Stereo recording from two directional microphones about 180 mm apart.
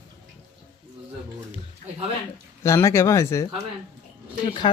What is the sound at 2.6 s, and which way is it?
Speech, 15° left (ahead or behind).